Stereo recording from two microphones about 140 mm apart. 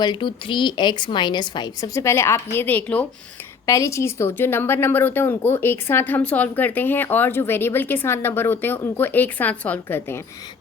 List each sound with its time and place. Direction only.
0.0 s a woman's voice: 35° left (ahead or behind); by 3.1 s 10° left (ahead or behind)
3.7 s speech: 20° left (ahead or behind)